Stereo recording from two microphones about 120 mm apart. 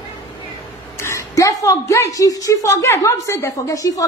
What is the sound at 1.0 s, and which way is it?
A woman's voice, 25° left (ahead or behind).